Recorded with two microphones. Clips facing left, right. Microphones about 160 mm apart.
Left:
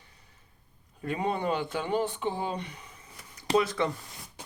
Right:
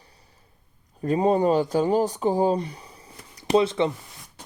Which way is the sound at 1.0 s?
35° right (ahead or behind).